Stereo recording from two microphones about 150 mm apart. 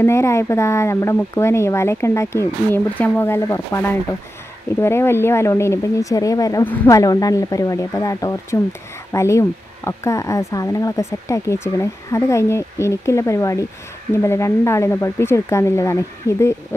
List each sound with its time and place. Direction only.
0.0 s a woman's voice: 20° left (ahead or behind)
6.6 s a woman's voice: 10° left (ahead or behind)
7.0 s speech: 25° left (ahead or behind)